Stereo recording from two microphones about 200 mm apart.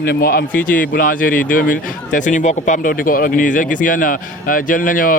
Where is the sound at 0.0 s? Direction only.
50° left (ahead or behind).